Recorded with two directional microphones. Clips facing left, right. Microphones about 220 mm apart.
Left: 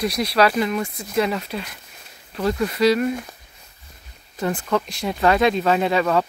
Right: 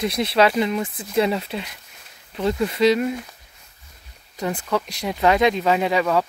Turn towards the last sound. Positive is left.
turn(degrees=-10)  # may be behind; listen again after turning